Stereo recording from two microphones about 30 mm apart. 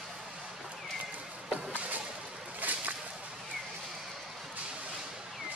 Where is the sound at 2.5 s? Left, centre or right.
Right.